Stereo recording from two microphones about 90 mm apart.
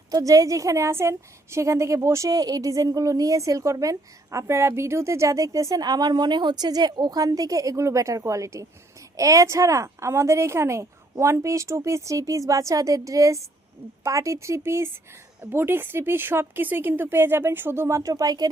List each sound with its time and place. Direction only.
0.1 s a woman's voice: 40° right (ahead or behind)